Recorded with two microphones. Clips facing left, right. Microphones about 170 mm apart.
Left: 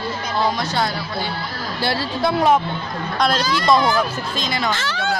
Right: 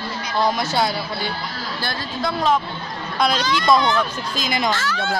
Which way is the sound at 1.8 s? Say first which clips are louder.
Left 8 dB; 70° left (ahead or behind).